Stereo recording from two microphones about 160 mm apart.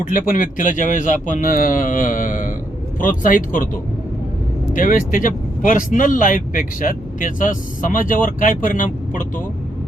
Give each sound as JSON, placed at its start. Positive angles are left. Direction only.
{"t": 0.1, "sound": "speech", "side_deg": 60}
{"t": 4.7, "sound": "speech", "side_deg": 55}